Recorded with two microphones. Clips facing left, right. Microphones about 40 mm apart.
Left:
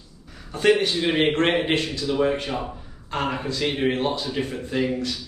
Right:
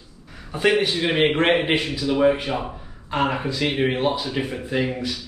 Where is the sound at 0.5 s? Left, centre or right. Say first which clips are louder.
Even; centre.